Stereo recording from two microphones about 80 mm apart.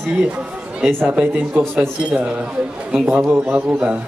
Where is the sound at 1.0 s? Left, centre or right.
Centre.